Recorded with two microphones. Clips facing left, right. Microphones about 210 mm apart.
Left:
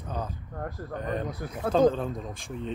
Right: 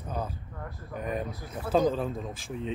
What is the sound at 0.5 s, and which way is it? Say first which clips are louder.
Speech: left 6 dB; 45° left (ahead or behind).